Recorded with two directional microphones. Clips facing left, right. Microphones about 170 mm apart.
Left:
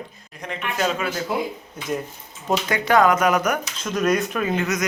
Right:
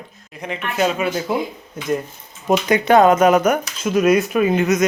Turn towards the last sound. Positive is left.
turn(degrees=-20)  # may be behind; listen again after turning